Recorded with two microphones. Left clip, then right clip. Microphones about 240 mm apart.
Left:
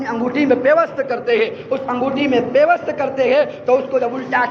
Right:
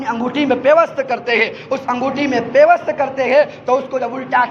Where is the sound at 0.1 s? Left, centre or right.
Right.